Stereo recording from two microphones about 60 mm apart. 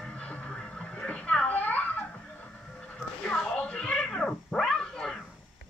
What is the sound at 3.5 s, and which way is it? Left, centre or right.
Cat, centre.